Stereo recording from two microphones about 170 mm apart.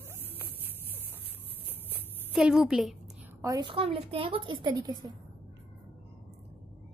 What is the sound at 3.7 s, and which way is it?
A woman's voice, 35° right (ahead or behind).